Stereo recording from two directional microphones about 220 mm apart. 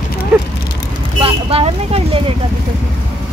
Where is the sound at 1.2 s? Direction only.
25° right (ahead or behind).